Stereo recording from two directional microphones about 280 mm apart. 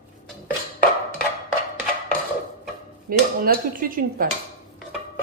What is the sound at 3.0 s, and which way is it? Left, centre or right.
Speech, right.